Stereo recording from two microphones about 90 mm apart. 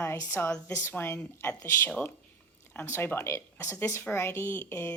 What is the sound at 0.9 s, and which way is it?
A woman's voice, 20° left (ahead or behind).